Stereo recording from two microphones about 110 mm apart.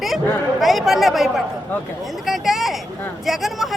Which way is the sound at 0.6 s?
Centre (ahead or behind).